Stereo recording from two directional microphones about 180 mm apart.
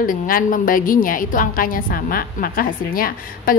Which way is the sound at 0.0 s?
50° left (ahead or behind).